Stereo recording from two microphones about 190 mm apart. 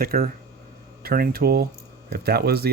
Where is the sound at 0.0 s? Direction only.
50° right (ahead or behind).